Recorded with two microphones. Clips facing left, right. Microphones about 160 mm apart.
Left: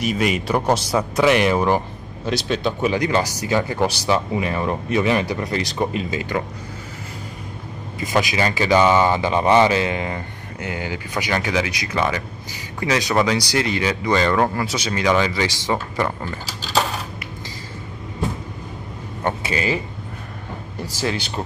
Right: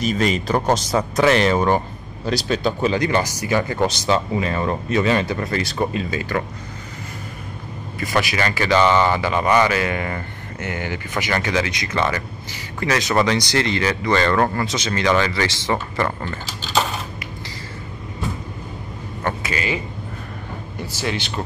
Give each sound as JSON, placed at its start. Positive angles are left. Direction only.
{"t": 0.0, "sound": "speech", "side_deg": 10}
{"t": 2.9, "sound": "speech", "side_deg": 10}
{"t": 8.0, "sound": "speech", "side_deg": 15}
{"t": 19.2, "sound": "speech", "side_deg": 30}